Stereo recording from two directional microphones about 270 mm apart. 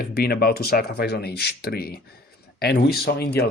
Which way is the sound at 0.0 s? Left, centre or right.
Left.